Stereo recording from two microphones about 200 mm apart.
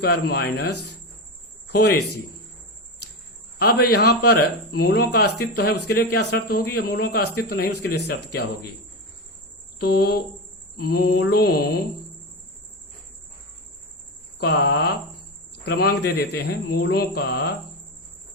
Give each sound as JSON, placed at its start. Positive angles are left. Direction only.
{"t": 0.0, "sound": "a man's voice", "side_deg": 55}
{"t": 3.6, "sound": "a man's voice", "side_deg": 50}
{"t": 9.7, "sound": "a man's voice", "side_deg": 50}
{"t": 14.3, "sound": "a man's voice", "side_deg": 55}